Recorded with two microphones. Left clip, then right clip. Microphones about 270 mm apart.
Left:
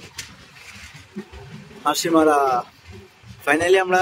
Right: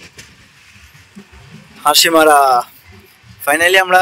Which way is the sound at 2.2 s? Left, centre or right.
Centre.